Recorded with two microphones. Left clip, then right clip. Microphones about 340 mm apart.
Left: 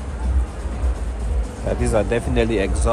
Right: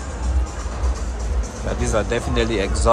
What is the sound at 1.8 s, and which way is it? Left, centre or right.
Speech, centre.